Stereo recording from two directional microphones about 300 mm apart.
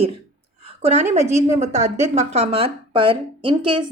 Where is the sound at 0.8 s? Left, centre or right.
Right.